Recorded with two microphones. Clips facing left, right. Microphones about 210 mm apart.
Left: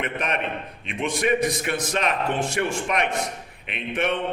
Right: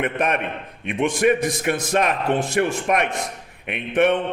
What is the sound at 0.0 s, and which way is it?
A man's voice, 50° right (ahead or behind).